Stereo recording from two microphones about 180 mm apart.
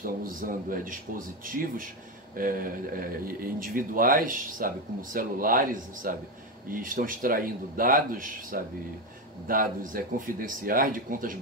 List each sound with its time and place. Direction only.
0.0 s a man's voice: 50° right (ahead or behind)